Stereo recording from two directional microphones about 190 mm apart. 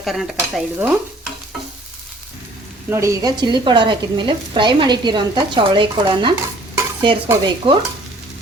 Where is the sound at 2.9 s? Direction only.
15° right (ahead or behind).